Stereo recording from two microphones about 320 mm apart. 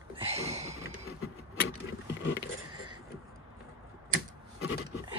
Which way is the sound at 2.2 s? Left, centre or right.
Left.